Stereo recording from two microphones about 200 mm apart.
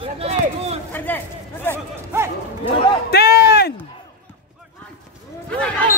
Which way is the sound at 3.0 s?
50° left (ahead or behind).